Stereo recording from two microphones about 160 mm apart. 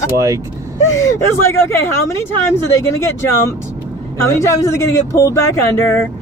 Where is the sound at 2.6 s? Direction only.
15° left (ahead or behind).